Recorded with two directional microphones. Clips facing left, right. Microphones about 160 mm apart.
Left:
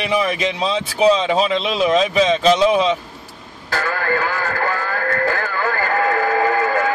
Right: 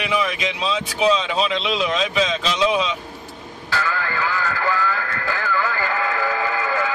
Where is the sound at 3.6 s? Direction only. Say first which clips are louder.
Left 4 dB; 45° left (ahead or behind).